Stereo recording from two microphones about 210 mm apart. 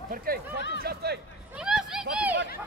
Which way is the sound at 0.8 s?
50° right (ahead or behind).